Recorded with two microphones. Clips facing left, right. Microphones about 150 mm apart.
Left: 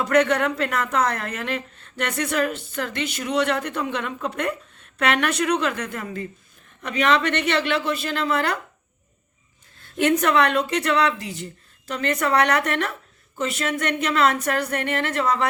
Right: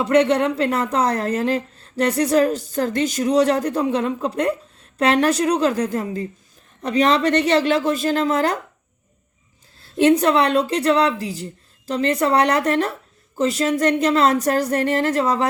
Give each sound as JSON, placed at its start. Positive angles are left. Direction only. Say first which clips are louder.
{"t": 0.0, "sound": "speech", "louder": "right 3 dB", "side_deg": -30}
{"t": 9.8, "sound": "speech", "louder": "right 5 dB", "side_deg": -30}